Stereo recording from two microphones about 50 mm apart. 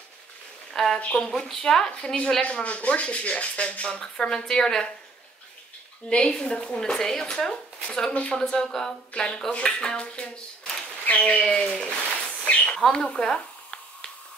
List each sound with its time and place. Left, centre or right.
0.9 s speech: left
6.0 s speech: centre
8.1 s speech: left
8.4 s speech: centre; by 11.4 s left
11.5 s a sound: left